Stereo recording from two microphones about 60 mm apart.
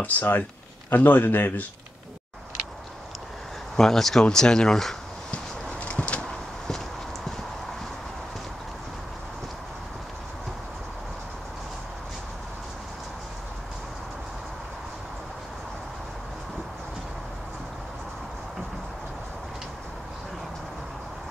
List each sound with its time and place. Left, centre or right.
0.0 s speech: left
3.7 s speech: centre
5.9 s a sound: left